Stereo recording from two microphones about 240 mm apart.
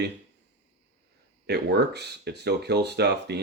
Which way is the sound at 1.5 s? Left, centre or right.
Right.